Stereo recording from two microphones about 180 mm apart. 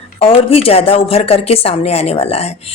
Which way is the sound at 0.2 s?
30° left (ahead or behind).